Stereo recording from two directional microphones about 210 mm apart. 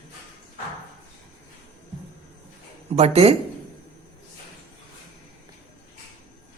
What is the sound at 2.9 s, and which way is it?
Speech, 30° right (ahead or behind).